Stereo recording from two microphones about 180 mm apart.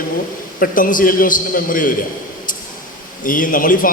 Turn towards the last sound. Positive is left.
turn(degrees=50)  # may be behind; listen again after turning